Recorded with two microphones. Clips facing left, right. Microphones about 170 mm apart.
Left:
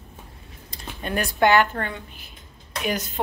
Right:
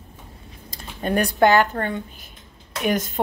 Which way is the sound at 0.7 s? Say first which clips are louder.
Right 5 dB; 40° right (ahead or behind).